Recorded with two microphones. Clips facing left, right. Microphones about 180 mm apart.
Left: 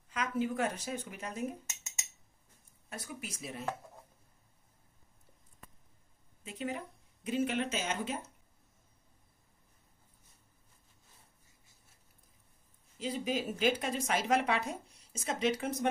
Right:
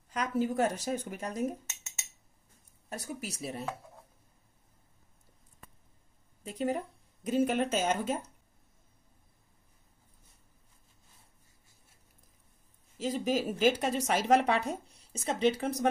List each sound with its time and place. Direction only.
0.1 s speech: 40° right (ahead or behind)
2.9 s speech: 40° right (ahead or behind)
6.4 s speech: 40° right (ahead or behind)
12.9 s speech: 45° right (ahead or behind)